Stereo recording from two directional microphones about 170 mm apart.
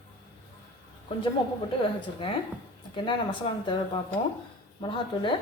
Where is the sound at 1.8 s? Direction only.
30° left (ahead or behind).